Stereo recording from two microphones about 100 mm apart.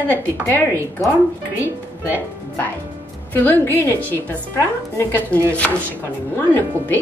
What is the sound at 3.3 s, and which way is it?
Speech, 20° left (ahead or behind).